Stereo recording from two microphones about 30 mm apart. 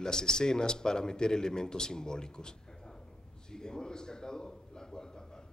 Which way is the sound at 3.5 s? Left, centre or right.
Left.